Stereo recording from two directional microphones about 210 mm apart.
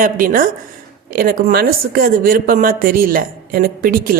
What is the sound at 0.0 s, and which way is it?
Speech, 45° right (ahead or behind).